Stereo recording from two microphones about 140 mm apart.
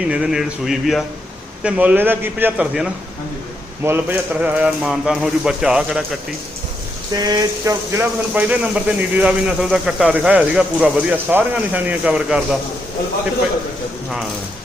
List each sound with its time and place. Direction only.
0.0 s speech: 5° right (ahead or behind)
3.8 s speech: 15° right (ahead or behind)
7.1 s a sound: 25° right (ahead or behind)
8.4 s speech: 10° right (ahead or behind)